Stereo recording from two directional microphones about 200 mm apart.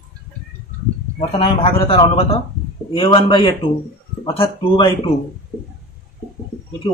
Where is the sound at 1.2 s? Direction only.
30° left (ahead or behind).